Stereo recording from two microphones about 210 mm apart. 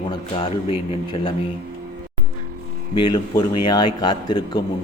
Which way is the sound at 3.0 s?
20° left (ahead or behind).